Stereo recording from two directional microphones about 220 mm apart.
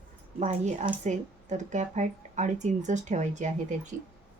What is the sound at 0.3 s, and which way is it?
Speech, 30° right (ahead or behind).